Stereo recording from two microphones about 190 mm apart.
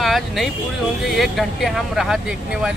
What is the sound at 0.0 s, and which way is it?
Speech, centre (ahead or behind).